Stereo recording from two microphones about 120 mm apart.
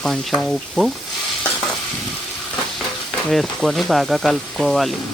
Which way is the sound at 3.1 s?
Centre (ahead or behind).